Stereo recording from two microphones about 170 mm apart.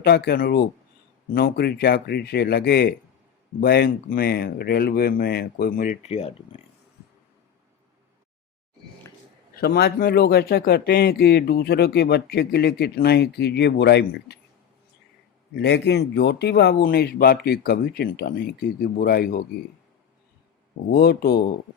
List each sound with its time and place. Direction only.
0.0 s speech: 70° left (ahead or behind); by 6.3 s 35° left (ahead or behind)
9.6 s speech: 65° left (ahead or behind)
15.5 s speech: 80° left; by 19.4 s 65° left (ahead or behind)
20.9 s speech: 70° left (ahead or behind)